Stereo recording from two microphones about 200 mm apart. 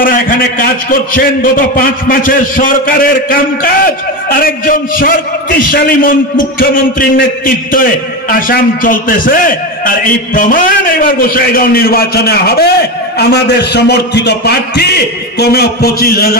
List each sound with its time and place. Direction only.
0.0 s a man's voice: 45° left (ahead or behind)